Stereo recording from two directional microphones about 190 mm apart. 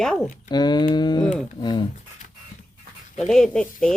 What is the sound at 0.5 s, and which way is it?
Speech, 20° left (ahead or behind).